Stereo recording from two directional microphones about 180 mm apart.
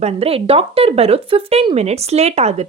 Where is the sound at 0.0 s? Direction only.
35° right (ahead or behind).